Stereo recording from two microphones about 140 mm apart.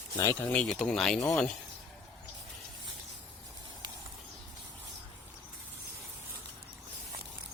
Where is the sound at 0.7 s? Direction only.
5° left (ahead or behind).